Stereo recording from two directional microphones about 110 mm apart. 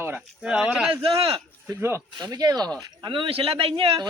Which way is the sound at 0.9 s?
55° right (ahead or behind).